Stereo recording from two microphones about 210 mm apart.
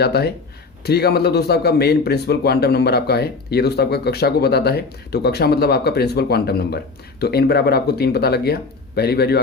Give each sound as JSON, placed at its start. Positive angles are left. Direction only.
{"t": 0.0, "sound": "a man's voice", "side_deg": 50}